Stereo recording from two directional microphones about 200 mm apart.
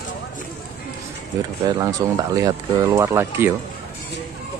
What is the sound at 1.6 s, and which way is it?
Speech, 20° right (ahead or behind).